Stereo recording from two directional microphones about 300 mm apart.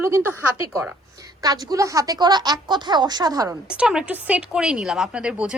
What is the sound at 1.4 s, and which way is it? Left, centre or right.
A woman's voice, centre.